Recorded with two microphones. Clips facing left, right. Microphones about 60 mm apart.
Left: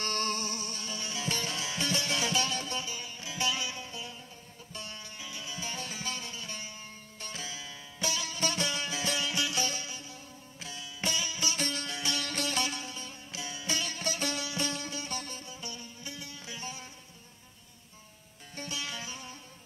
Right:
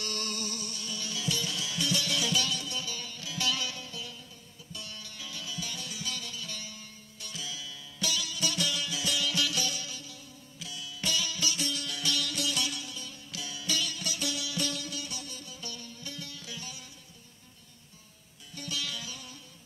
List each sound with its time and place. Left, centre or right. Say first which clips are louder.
0.0 s music: left 4 dB; left
2.9 s music: even; left
18.5 s music: right 1 dB; left